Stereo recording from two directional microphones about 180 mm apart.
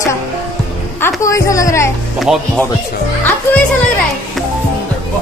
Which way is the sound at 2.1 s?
Centre (ahead or behind).